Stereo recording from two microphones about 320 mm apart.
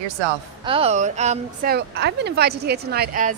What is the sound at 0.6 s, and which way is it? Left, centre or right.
Speech, centre.